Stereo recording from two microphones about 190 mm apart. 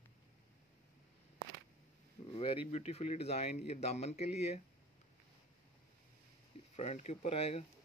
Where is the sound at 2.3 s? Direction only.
30° left (ahead or behind).